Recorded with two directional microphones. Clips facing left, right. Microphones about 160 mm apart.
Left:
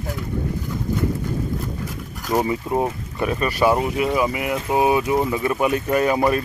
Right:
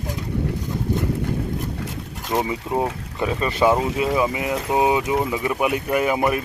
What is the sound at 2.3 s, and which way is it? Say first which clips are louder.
Speech: left 2 dB; 5° right (ahead or behind).